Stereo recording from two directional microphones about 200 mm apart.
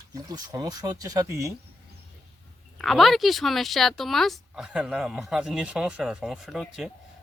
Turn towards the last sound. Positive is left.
turn(degrees=0)  # may be behind; listen again after turning